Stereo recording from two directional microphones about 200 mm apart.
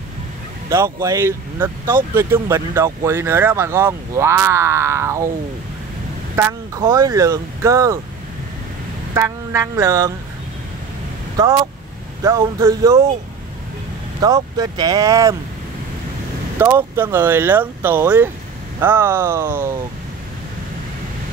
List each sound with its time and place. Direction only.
0.7 s speech: 15° right (ahead or behind)
6.3 s speech: 15° right (ahead or behind)
9.1 s speech: 15° right (ahead or behind)
12.2 s speech: 15° right (ahead or behind)
14.2 s speech: 20° right (ahead or behind)
16.5 s speech: 10° right (ahead or behind)